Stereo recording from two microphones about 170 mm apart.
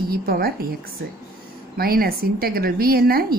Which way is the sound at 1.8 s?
60° right (ahead or behind).